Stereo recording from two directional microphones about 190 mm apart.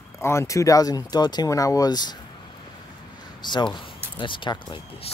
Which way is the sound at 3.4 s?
25° left (ahead or behind).